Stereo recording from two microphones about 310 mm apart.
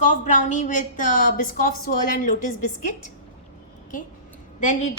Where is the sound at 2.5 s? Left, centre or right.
Left.